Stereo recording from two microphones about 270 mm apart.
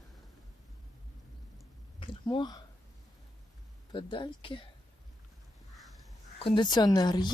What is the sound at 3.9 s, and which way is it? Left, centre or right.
Speech, centre.